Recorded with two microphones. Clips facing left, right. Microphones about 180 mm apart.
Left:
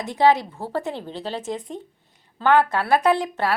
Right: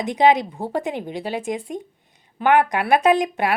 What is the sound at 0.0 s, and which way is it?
Speech, 15° right (ahead or behind).